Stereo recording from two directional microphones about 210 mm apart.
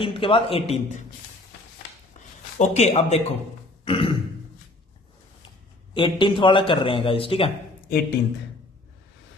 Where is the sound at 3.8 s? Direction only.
25° left (ahead or behind).